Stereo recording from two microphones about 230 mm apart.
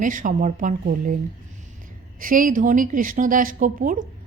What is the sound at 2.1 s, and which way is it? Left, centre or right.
A woman's voice, right.